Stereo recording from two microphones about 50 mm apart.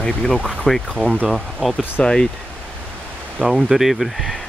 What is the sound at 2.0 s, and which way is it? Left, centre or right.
Speech, centre.